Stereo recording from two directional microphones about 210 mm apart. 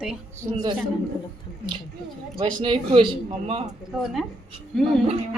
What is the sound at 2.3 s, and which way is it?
Speech, 20° right (ahead or behind).